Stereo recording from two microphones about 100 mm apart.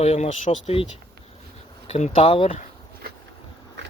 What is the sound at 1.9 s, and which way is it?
Speech, 80° left.